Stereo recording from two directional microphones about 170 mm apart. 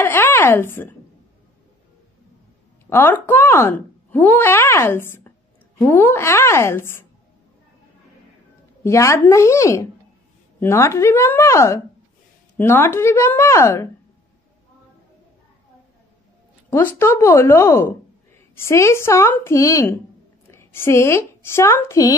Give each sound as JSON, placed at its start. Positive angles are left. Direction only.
{"t": 0.0, "sound": "a sound", "side_deg": 15}
{"t": 2.9, "sound": "speech", "side_deg": 10}
{"t": 8.8, "sound": "speech", "side_deg": 15}
{"t": 16.7, "sound": "a woman's voice", "side_deg": 15}